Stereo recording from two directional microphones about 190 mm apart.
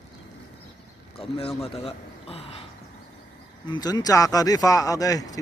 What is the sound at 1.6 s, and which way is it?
Speech, 30° left (ahead or behind).